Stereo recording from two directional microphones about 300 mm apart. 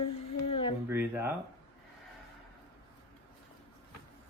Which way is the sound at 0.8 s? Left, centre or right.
Centre.